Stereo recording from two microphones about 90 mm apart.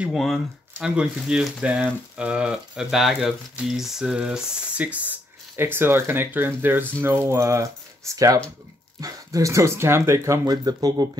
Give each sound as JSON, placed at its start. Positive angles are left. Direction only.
{"t": 0.1, "sound": "speech", "side_deg": 0}